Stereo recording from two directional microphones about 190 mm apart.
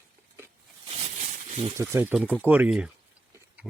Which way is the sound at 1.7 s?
15° right (ahead or behind).